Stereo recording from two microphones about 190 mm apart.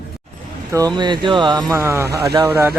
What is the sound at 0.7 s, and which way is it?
Speech, 20° right (ahead or behind).